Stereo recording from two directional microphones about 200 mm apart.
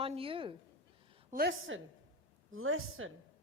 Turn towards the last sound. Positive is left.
turn(degrees=-85)